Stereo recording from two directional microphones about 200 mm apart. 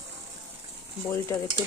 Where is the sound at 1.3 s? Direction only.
15° left (ahead or behind).